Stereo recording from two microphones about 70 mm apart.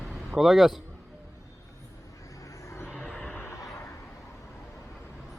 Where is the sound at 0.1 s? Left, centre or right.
Centre.